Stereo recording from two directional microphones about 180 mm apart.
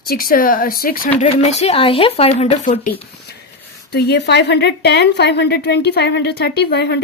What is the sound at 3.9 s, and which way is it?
A woman's voice, 65° left (ahead or behind).